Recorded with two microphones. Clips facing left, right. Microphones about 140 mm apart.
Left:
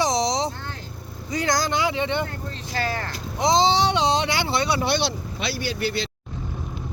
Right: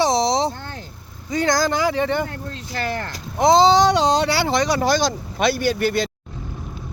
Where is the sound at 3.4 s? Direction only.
45° right (ahead or behind).